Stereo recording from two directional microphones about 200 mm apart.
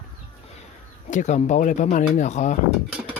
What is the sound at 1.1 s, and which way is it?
Speech, 35° left (ahead or behind).